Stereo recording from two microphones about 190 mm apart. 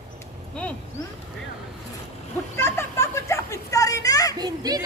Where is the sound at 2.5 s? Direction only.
15° left (ahead or behind).